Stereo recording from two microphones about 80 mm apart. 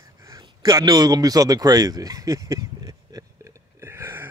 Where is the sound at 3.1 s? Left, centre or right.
Right.